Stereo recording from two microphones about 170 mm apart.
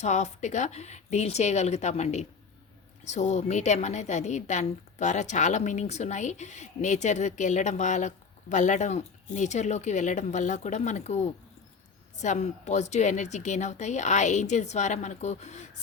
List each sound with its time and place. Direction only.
0.0 s a woman's voice: 45° left (ahead or behind)